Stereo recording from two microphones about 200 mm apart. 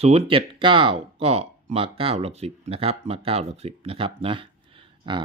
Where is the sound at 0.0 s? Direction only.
30° right (ahead or behind).